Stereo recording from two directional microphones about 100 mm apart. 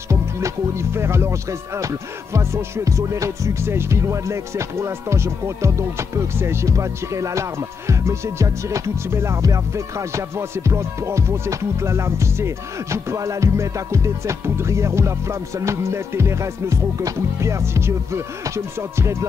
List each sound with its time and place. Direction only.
0.1 s speech: 30° right (ahead or behind)
1.8 s music: 30° right (ahead or behind)